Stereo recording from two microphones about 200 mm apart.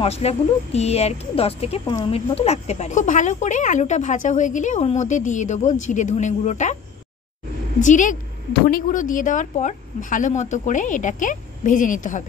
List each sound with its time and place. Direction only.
0.0 s speech: 30° left (ahead or behind)
7.8 s speech: 40° left (ahead or behind)